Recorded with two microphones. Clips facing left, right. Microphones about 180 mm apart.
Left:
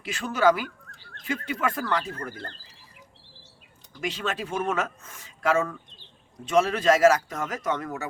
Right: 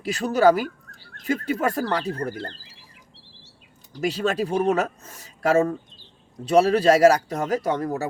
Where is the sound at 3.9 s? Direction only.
40° right (ahead or behind).